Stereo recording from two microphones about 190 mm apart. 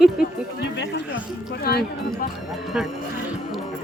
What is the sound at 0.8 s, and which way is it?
Speech, 65° left (ahead or behind).